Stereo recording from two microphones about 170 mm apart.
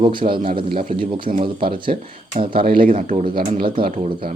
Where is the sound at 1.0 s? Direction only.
30° right (ahead or behind).